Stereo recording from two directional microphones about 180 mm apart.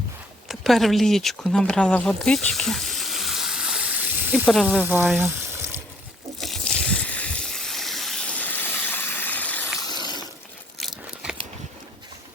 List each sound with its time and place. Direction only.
0.4 s speech: centre (ahead or behind)
6.4 s a sound: centre (ahead or behind)
9.8 s water: 25° left (ahead or behind)
10.8 s crunch: 5° right (ahead or behind)